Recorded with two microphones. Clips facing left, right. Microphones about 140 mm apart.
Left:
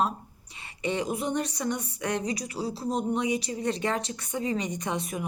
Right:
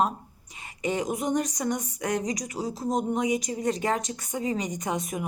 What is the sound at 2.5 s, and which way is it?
Speech, 45° right (ahead or behind).